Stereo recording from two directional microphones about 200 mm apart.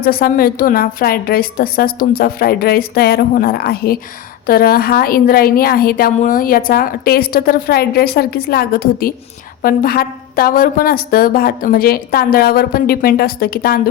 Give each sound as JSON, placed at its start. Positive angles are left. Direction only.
{"t": 0.0, "sound": "a woman's voice", "side_deg": 50}